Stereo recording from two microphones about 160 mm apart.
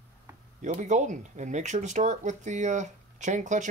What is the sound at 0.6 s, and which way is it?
Speech, 50° right (ahead or behind).